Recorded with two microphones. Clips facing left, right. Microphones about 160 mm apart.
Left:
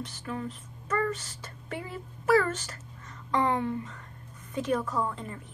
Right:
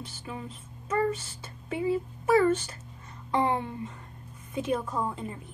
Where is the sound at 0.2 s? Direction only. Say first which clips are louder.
Left 4 dB; 10° right (ahead or behind).